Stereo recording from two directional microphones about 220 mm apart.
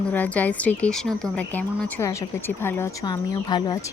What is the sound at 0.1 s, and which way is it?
Speech, 5° left (ahead or behind).